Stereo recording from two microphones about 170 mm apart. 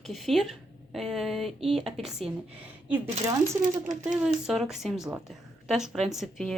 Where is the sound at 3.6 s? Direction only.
50° right (ahead or behind).